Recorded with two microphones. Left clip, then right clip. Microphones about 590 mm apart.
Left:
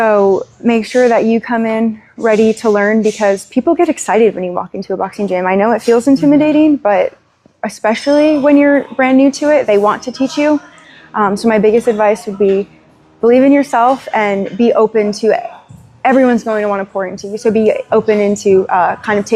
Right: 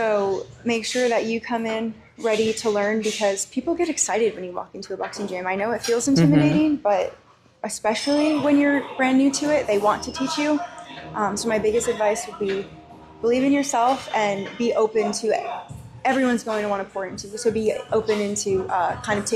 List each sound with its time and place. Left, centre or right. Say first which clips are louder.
0.0 s a woman's voice: left 11 dB; left
6.6 s a woman's voice: left 10 dB; left
11.1 s a woman's voice: left 11 dB; left
13.2 s a woman's voice: left 12 dB; left